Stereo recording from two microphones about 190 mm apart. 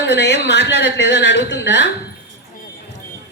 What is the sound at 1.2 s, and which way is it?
Speech, 65° left (ahead or behind).